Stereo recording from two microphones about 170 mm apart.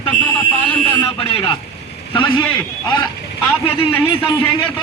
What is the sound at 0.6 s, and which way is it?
Speech, 10° left (ahead or behind).